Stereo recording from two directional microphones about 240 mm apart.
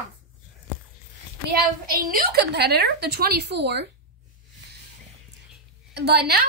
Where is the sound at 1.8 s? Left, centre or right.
Right.